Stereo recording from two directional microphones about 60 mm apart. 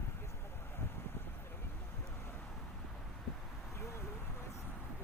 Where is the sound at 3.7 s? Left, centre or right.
Left.